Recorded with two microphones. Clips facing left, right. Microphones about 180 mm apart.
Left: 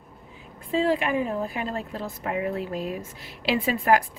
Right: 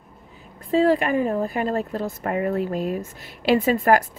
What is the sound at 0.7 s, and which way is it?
Speech, 40° right (ahead or behind).